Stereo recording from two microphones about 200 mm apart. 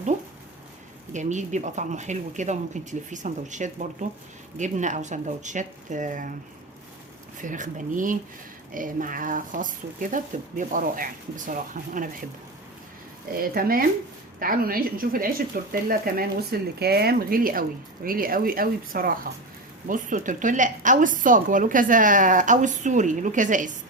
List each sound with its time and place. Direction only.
1.1 s a woman's voice: 35° right (ahead or behind)
7.4 s a woman's voice: 40° right (ahead or behind)
13.4 s a woman's voice: 45° right (ahead or behind)